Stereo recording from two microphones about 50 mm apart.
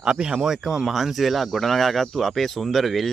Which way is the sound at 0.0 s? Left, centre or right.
Centre.